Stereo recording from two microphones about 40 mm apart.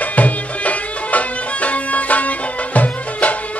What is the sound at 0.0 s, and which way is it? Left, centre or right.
Music, left.